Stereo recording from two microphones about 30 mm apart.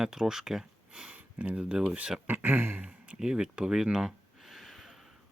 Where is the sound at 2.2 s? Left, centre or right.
Right.